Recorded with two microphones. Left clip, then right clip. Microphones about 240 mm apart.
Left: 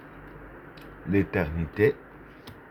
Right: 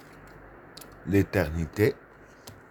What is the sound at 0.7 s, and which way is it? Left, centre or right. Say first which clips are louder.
Speech: right 1 dB; right.